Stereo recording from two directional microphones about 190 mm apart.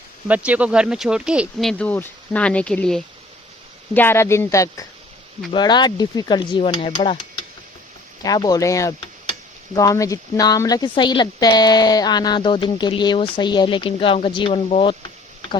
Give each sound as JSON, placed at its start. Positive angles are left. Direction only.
{"t": 0.3, "sound": "speech", "side_deg": -10}
{"t": 8.2, "sound": "speech", "side_deg": 20}